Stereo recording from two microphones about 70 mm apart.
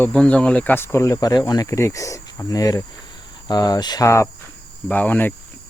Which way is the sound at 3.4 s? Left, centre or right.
Left.